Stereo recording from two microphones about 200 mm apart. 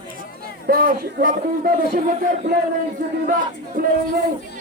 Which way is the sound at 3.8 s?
45° right (ahead or behind).